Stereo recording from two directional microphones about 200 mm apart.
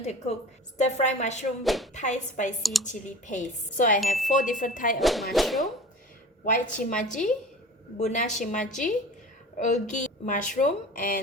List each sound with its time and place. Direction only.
0.0 s a woman's voice: 30° left (ahead or behind)
1.6 s speech: centre (ahead or behind)
1.9 s a woman's voice: 35° left (ahead or behind)
4.0 s speech: centre (ahead or behind)
4.3 s a woman's voice: 40° left (ahead or behind)
4.9 s speech: centre (ahead or behind)
6.4 s a woman's voice: 40° left (ahead or behind)